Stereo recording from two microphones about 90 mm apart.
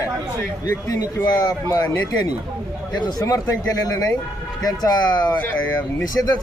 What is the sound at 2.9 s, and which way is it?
Speech, 50° left (ahead or behind).